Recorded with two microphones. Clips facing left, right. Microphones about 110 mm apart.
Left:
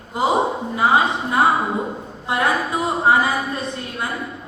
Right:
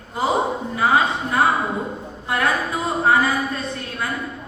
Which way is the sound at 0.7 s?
20° left (ahead or behind).